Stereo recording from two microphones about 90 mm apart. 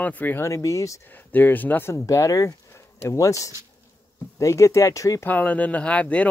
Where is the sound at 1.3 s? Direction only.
20° left (ahead or behind).